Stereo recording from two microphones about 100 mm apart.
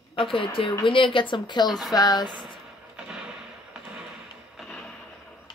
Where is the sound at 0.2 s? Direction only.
60° left (ahead or behind).